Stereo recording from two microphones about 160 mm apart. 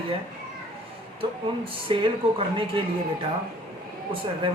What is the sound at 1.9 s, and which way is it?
Speech, 35° right (ahead or behind).